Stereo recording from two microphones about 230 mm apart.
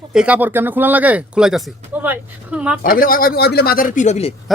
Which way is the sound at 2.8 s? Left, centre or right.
Left.